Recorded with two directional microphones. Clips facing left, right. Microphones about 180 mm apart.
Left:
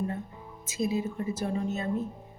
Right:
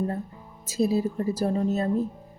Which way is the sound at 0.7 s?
35° right (ahead or behind).